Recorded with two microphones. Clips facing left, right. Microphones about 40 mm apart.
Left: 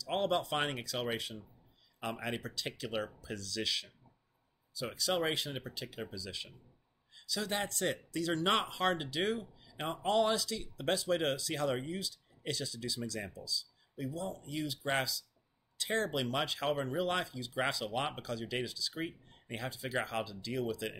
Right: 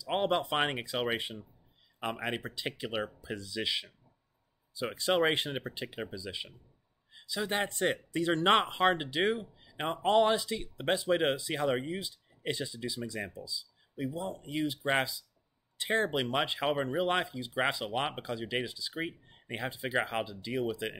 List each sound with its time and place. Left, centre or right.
0.0 s speech: right